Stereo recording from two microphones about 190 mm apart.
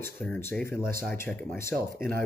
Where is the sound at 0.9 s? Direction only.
50° right (ahead or behind).